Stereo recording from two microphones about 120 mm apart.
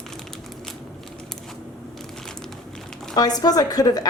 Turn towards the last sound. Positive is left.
turn(degrees=30)  # may be behind; listen again after turning